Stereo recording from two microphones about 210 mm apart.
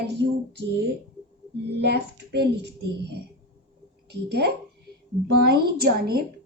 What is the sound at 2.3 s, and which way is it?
Speech, 55° right (ahead or behind).